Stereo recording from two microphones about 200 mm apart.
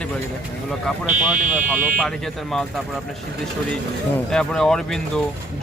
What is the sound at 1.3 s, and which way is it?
Speech, 40° right (ahead or behind).